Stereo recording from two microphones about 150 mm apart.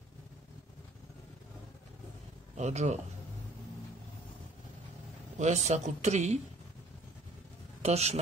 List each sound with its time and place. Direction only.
2.5 s speech: 50° right (ahead or behind)
5.4 s speech: 50° right (ahead or behind)
7.8 s speech: 45° right (ahead or behind)